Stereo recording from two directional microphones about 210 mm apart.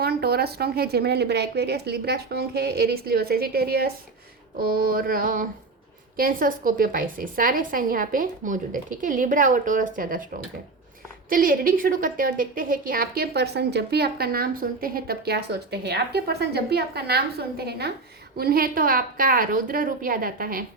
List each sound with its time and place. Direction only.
0.0 s a woman's voice: 50° right (ahead or behind)
11.3 s a woman's voice: 40° right (ahead or behind)